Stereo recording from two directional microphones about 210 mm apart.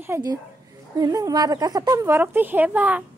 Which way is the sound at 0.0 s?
15° right (ahead or behind).